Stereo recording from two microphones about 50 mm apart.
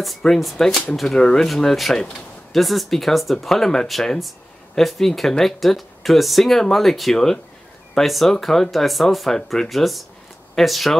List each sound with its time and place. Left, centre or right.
0.4 s speech: centre